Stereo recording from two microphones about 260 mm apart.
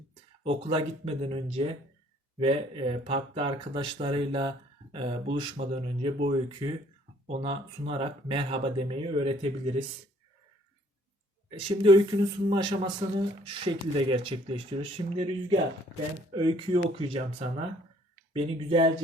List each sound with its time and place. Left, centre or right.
0.4 s speech: right
11.5 s speech: centre
18.3 s speech: centre